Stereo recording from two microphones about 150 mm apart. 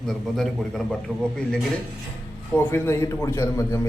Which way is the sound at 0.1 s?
Centre (ahead or behind).